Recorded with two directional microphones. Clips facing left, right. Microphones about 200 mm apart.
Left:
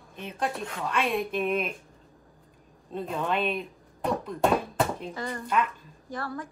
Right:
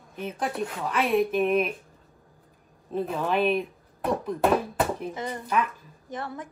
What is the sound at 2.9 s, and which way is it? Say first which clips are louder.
Speech: right 3 dB; 5° right (ahead or behind).